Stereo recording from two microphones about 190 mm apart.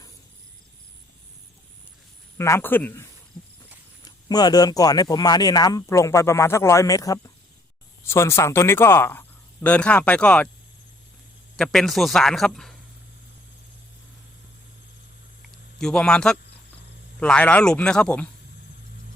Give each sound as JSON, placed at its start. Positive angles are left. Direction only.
{"t": 2.4, "sound": "speech", "side_deg": 15}
{"t": 11.5, "sound": "speech", "side_deg": 0}
{"t": 15.8, "sound": "speech", "side_deg": 5}